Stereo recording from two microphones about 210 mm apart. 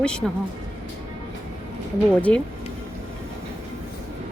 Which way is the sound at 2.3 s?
5° left (ahead or behind).